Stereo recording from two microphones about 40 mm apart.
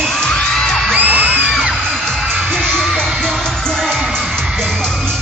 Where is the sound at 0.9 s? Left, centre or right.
Right.